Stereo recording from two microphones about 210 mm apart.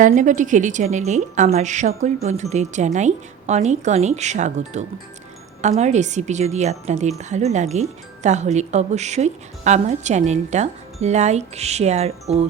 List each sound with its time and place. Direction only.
0.0 s speech: 35° right (ahead or behind)